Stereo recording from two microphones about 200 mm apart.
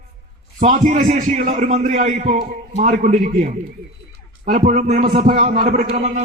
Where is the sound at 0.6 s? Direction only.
35° right (ahead or behind).